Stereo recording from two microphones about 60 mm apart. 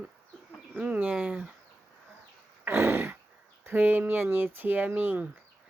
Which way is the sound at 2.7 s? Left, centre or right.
Right.